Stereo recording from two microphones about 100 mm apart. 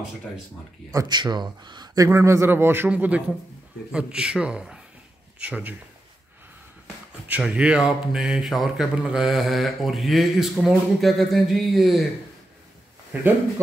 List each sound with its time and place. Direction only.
1.0 s speech: 45° right (ahead or behind)
2.0 s a man's voice: 30° right (ahead or behind)
7.2 s speech: 10° right (ahead or behind)